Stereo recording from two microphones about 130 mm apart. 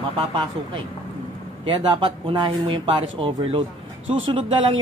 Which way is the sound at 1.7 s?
40° right (ahead or behind).